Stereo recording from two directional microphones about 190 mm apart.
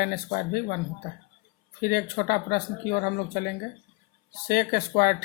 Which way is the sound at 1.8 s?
50° left (ahead or behind).